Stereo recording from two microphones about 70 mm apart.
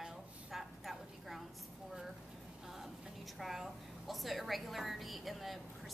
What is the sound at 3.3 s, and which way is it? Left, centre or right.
A woman's voice, centre.